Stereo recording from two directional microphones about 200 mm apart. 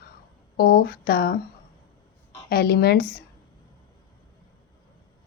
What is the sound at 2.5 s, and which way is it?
Speech, 50° left (ahead or behind).